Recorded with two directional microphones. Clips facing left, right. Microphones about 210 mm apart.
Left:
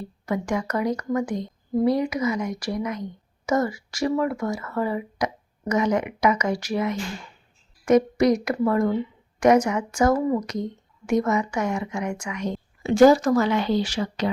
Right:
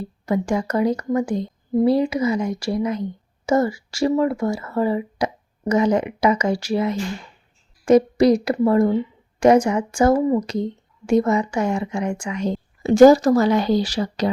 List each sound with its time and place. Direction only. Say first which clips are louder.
0.0 s a woman's voice: right 5 dB; 30° right (ahead or behind)